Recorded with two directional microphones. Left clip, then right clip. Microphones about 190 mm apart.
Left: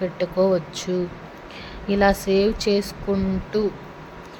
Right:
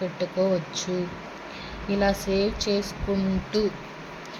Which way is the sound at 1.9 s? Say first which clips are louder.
Left 6 dB; 30° left (ahead or behind).